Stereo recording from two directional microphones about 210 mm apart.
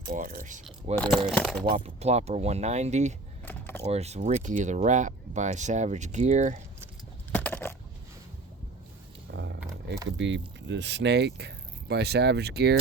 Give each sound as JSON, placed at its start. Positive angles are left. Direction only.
{"t": 0.1, "sound": "speech", "side_deg": -40}
{"t": 1.3, "sound": "speech", "side_deg": 0}
{"t": 1.7, "sound": "speech", "side_deg": -30}
{"t": 3.4, "sound": "keys jangling", "side_deg": 10}
{"t": 3.8, "sound": "speech", "side_deg": -30}
{"t": 7.3, "sound": "a sound", "side_deg": 10}
{"t": 9.3, "sound": "a sound", "side_deg": -60}
{"t": 10.2, "sound": "speech", "side_deg": -60}